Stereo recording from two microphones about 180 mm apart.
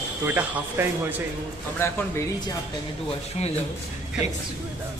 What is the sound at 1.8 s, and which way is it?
Speech, 15° left (ahead or behind).